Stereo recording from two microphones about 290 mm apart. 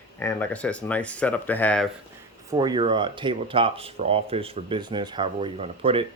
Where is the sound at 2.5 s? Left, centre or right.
Centre.